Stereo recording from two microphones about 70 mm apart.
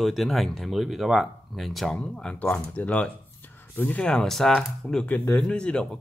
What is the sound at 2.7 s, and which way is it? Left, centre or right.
Speech, left.